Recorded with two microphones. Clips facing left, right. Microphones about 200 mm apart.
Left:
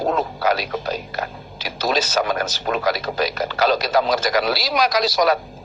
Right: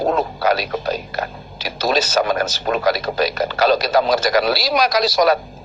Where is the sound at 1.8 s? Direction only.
35° right (ahead or behind).